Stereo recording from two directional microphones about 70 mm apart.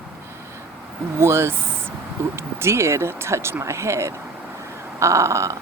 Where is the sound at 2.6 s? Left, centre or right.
Right.